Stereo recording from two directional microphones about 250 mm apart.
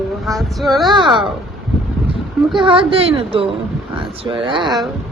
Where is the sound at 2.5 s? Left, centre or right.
Right.